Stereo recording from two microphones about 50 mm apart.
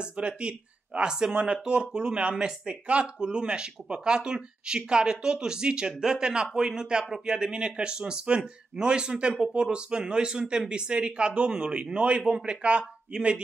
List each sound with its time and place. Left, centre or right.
0.0 s speech: right